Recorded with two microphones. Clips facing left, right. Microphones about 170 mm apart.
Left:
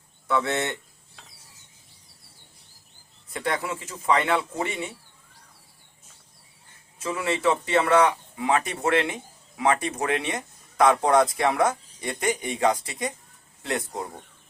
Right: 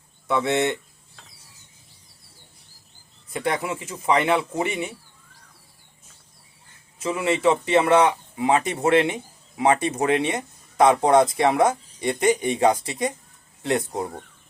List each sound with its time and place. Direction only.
0.3 s speech: 20° right (ahead or behind)
3.3 s speech: 20° right (ahead or behind)
7.0 s a man's voice: 20° right (ahead or behind)